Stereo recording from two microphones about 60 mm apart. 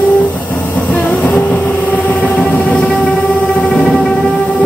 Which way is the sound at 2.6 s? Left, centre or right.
Left.